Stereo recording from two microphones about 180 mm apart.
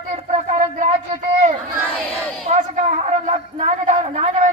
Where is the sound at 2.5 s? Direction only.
45° right (ahead or behind).